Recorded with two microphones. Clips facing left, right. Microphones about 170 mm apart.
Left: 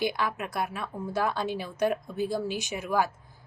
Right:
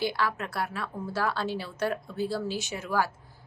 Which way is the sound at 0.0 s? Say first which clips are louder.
Even; 15° left (ahead or behind).